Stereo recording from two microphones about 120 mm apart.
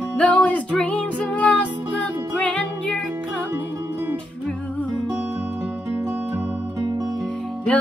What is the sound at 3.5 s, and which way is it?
Music, 20° right (ahead or behind).